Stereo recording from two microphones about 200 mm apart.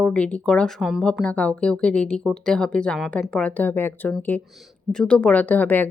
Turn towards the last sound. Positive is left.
turn(degrees=10)  # may be behind; listen again after turning